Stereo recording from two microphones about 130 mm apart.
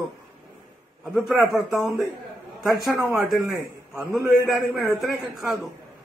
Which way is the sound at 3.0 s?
Centre (ahead or behind).